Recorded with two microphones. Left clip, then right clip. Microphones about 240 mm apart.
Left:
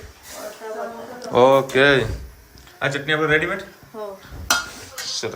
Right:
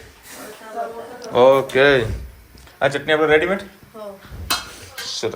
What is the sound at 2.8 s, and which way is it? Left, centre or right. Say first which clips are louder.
Speech: right 4 dB; centre.